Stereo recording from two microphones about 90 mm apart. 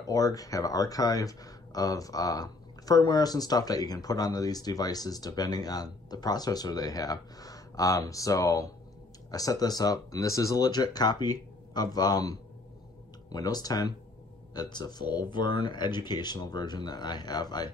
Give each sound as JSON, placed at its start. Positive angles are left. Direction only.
{"t": 0.1, "sound": "speech", "side_deg": 40}